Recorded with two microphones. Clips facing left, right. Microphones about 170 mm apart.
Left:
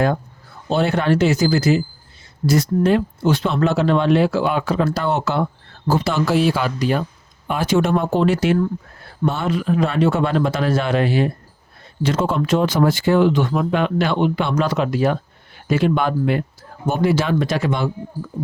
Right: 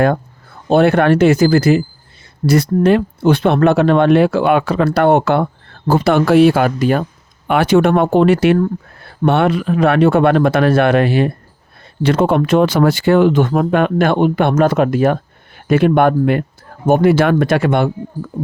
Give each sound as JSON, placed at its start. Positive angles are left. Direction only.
{"t": 0.7, "sound": "speech", "side_deg": -60}